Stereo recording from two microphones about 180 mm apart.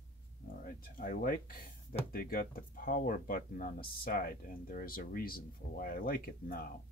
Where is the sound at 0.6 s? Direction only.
50° left (ahead or behind).